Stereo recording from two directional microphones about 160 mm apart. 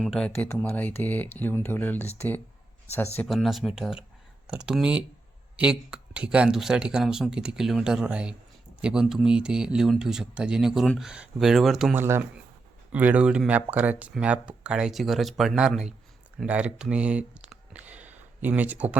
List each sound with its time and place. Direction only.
0.0 s speech: 5° left (ahead or behind)
3.2 s speech: centre (ahead or behind)
11.9 s speech: 15° right (ahead or behind)